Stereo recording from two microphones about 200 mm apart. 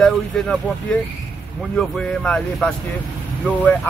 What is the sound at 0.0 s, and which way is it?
Speech, 5° left (ahead or behind).